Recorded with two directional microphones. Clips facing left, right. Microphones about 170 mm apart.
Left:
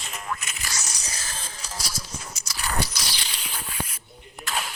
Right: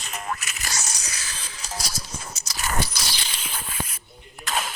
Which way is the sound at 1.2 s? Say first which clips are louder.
Left 1 dB; 50° left (ahead or behind).